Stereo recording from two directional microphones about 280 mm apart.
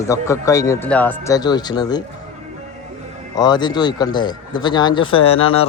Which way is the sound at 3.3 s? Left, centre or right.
Centre.